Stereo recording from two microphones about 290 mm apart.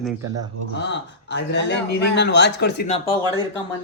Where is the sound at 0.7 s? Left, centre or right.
Left.